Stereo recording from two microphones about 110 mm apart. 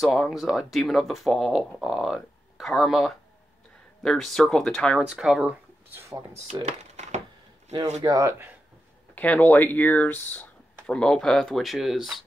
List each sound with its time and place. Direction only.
0.0 s speech: centre (ahead or behind)
5.0 s speech: 10° right (ahead or behind)
5.9 s a sound: 20° right (ahead or behind)
6.6 s a sound: 90° right
8.0 s speech: 30° right (ahead or behind)
9.1 s speech: 15° left (ahead or behind)